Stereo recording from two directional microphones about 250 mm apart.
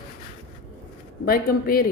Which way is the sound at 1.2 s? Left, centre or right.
Left.